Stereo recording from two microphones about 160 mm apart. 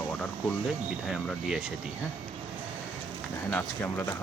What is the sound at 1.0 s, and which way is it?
Speech, centre (ahead or behind).